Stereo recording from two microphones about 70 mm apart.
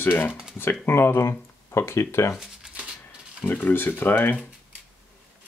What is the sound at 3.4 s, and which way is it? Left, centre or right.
Speech, left.